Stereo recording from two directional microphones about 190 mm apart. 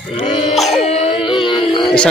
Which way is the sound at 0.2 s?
30° left (ahead or behind).